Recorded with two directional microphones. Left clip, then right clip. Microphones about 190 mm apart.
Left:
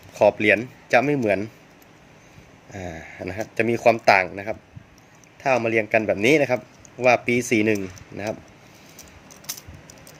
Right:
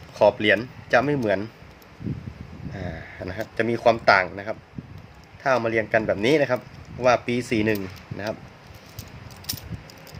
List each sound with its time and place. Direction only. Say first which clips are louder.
0.1 s speech: left 1 dB; 15° left (ahead or behind)
2.7 s speech: left 2 dB; 25° left (ahead or behind)